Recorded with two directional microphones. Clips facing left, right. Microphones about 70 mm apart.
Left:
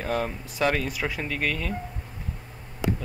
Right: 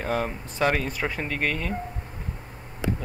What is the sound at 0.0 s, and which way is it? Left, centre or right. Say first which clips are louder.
Speech: right 1 dB; centre.